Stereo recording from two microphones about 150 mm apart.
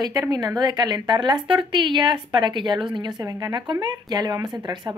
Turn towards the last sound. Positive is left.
turn(degrees=-25)  # may be behind; listen again after turning